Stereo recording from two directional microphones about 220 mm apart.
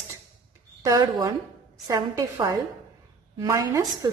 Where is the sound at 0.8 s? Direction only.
15° right (ahead or behind).